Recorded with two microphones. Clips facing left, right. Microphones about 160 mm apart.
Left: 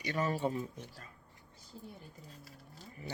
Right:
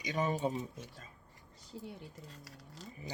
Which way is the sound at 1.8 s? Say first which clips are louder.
Right 4 dB; 80° right.